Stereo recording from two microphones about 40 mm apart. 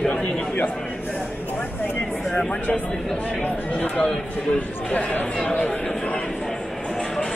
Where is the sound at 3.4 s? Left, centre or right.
Left.